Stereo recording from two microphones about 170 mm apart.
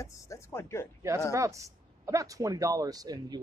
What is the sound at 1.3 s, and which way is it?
Speech, 20° right (ahead or behind).